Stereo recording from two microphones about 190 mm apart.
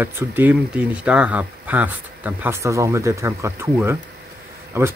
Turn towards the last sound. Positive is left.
turn(degrees=-10)  # may be behind; listen again after turning